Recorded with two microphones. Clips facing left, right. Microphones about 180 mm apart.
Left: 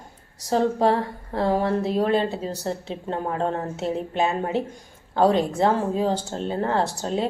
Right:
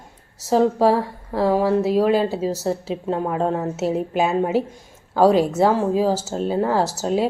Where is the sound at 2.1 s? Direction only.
5° right (ahead or behind).